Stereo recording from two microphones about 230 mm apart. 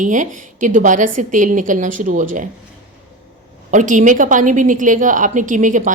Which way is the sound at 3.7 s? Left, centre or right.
Right.